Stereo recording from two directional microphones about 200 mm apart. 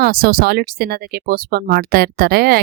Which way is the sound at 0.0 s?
50° right (ahead or behind).